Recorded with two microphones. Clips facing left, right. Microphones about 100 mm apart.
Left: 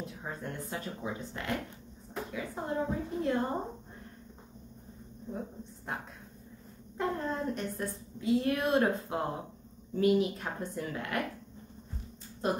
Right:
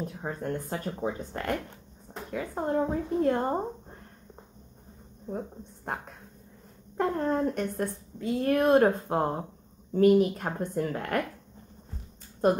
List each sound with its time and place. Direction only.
0.0 s a woman's voice: 45° right (ahead or behind)
7.0 s a woman's voice: 45° right (ahead or behind)
12.4 s a woman's voice: 50° right (ahead or behind)